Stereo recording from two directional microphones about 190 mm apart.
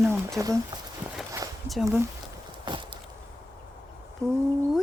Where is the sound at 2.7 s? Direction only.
25° right (ahead or behind).